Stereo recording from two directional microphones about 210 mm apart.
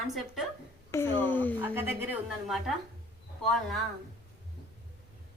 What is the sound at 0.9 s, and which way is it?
Speech, 10° left (ahead or behind).